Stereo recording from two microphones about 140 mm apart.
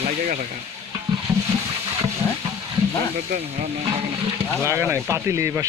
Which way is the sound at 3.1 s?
55° right (ahead or behind).